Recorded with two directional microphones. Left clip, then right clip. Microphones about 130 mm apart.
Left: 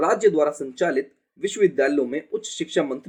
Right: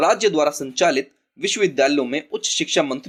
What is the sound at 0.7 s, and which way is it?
Speech, 15° right (ahead or behind).